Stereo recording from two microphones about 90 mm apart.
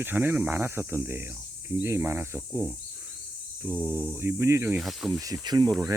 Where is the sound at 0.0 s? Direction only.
25° right (ahead or behind).